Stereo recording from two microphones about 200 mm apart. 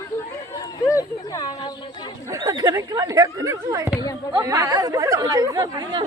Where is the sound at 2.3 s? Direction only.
20° right (ahead or behind).